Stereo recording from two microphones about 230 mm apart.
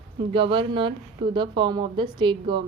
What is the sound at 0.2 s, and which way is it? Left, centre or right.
A woman's voice, right.